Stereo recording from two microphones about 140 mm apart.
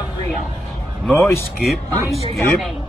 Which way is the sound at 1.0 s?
10° left (ahead or behind).